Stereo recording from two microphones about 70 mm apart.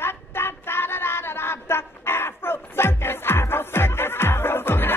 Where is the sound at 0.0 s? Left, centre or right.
Left.